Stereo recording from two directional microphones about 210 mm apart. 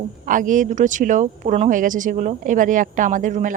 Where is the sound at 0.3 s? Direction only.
40° right (ahead or behind).